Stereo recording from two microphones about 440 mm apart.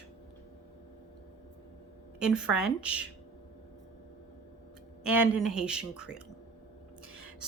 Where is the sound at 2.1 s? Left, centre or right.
Centre.